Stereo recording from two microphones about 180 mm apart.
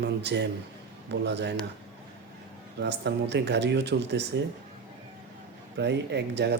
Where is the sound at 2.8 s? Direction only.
70° right (ahead or behind).